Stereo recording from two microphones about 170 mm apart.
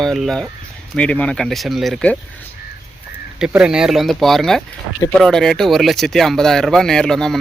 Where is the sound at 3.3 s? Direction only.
5° right (ahead or behind).